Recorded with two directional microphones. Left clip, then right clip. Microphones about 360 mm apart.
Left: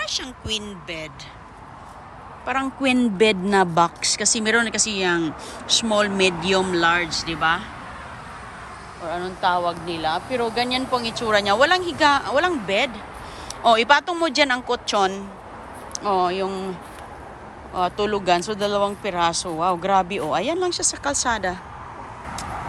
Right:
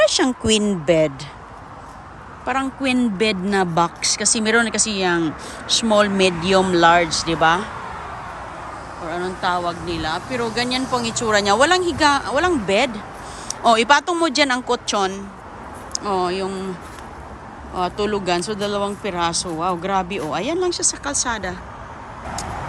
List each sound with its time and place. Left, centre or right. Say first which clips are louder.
0.4 s speech: right 11 dB; centre
2.5 s a woman's voice: right 1 dB; centre
9.0 s a woman's voice: even; centre
17.7 s a woman's voice: even; centre